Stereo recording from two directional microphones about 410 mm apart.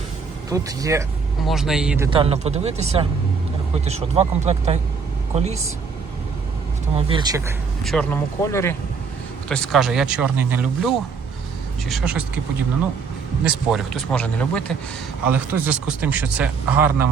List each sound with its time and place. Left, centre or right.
0.5 s speech: centre
6.9 s speech: centre
13.4 s speech: centre